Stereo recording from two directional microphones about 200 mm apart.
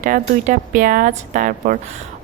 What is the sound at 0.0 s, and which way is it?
Speech, 40° right (ahead or behind).